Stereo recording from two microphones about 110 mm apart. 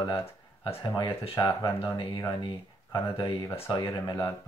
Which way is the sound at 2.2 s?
45° left (ahead or behind).